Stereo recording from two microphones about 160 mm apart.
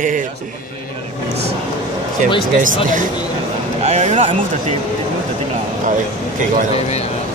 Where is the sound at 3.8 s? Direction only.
45° right (ahead or behind).